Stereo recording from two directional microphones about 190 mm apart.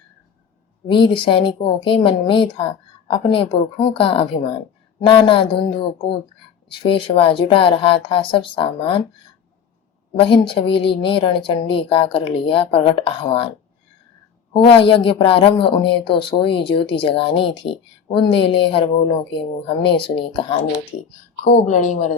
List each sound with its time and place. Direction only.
0.9 s speech: 25° left (ahead or behind)
10.2 s speech: 25° left (ahead or behind)
14.5 s speech: 30° left (ahead or behind)
21.4 s speech: 40° left (ahead or behind)